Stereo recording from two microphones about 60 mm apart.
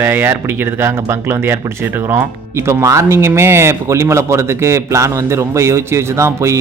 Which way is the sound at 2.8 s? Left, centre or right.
Right.